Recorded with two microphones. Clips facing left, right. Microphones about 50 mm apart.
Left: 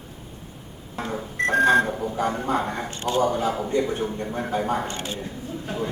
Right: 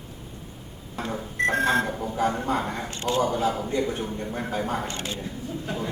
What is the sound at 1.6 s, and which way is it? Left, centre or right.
A woman's voice, centre.